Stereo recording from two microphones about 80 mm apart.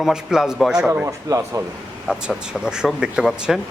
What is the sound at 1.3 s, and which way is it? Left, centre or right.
Speech, right.